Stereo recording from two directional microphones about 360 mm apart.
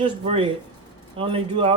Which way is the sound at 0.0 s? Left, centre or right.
Centre.